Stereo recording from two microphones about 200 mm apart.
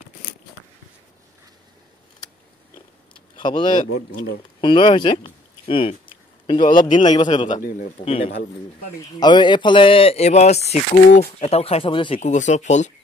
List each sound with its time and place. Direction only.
3.3 s speech: 25° left (ahead or behind)
4.6 s a sound: 25° left (ahead or behind)
6.8 s speech: 25° left (ahead or behind)